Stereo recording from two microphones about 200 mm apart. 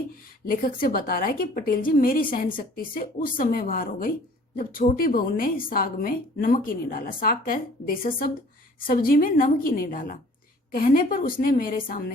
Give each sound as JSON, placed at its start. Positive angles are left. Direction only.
{"t": 0.4, "sound": "a woman's voice", "side_deg": 45}